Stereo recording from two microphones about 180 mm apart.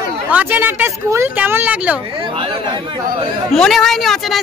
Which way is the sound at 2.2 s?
30° right (ahead or behind).